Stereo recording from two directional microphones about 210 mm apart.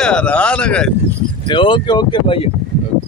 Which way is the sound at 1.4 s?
25° left (ahead or behind).